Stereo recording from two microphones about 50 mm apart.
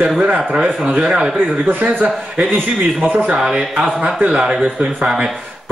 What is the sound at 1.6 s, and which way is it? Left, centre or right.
A man's voice, right.